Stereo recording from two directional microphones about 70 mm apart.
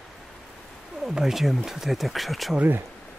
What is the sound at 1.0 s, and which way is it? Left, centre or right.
Speech, centre.